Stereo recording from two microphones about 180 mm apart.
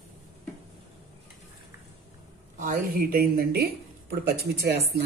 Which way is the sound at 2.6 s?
50° right (ahead or behind).